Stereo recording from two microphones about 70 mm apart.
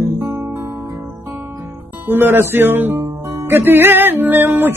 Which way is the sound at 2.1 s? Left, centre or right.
Right.